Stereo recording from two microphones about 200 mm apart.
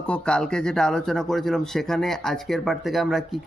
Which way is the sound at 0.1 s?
5° left (ahead or behind).